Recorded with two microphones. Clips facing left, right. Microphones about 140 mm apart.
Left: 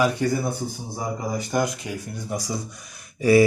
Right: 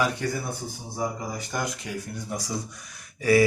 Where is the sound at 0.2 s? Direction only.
15° left (ahead or behind).